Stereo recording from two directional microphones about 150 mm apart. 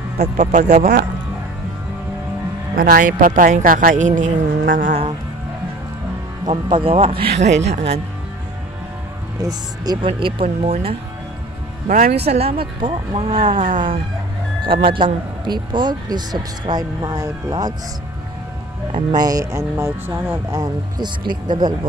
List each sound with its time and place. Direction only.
0.4 s speech: 55° right (ahead or behind)
2.7 s speech: 75° right (ahead or behind)
6.4 s speech: 35° right (ahead or behind)
9.4 s speech: 25° right (ahead or behind)
11.9 s speech: 80° right
12.3 s speech: 40° right (ahead or behind); by 17.7 s 25° right (ahead or behind)
18.9 s speech: 35° right (ahead or behind)
19.2 s speech: 20° right (ahead or behind)
20.6 s speech: 30° right (ahead or behind)